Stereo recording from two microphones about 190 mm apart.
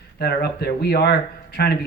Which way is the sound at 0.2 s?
55° left (ahead or behind).